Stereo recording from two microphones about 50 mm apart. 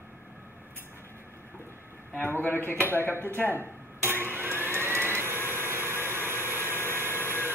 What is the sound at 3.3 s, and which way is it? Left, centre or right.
Speech, left.